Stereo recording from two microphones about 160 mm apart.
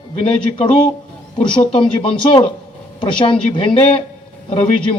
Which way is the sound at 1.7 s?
35° left (ahead or behind).